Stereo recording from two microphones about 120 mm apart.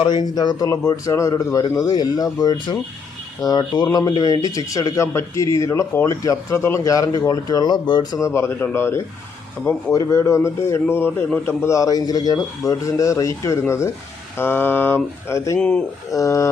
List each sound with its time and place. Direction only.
0.0 s a man's voice: 35° left (ahead or behind)
8.2 s speech: 20° left (ahead or behind)
15.5 s speech: 10° left (ahead or behind)
16.0 s speech: 25° left (ahead or behind)